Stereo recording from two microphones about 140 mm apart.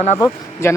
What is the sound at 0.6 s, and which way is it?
Speech, 20° left (ahead or behind).